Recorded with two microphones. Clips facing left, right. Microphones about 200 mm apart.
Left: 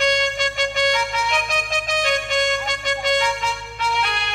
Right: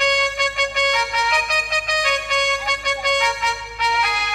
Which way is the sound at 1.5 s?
50° left (ahead or behind).